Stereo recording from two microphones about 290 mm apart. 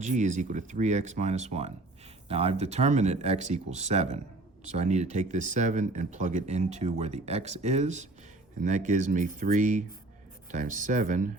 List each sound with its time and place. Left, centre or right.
0.0 s speech: right